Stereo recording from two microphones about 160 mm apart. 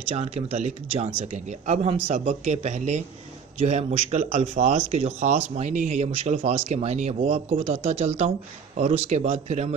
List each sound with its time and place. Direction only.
0.1 s speech: 40° right (ahead or behind)